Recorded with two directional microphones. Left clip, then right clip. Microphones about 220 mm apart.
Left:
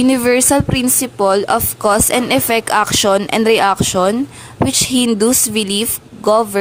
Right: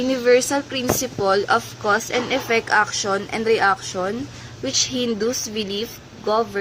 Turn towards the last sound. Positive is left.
turn(degrees=45)  # may be behind; listen again after turning